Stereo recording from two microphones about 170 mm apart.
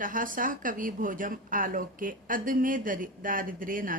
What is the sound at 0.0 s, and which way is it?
Speech, 50° right (ahead or behind).